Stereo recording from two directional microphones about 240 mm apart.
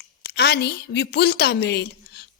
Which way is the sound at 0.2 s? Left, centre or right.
Left.